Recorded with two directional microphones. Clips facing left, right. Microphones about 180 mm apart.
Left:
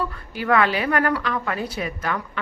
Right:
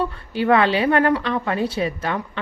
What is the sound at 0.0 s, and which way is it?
A woman's voice, 25° right (ahead or behind).